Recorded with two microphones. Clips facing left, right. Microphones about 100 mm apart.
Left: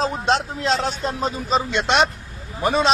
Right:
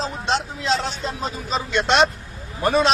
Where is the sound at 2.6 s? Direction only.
Centre (ahead or behind).